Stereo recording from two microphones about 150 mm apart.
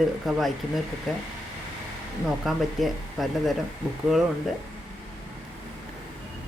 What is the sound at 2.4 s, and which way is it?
Speech, centre (ahead or behind).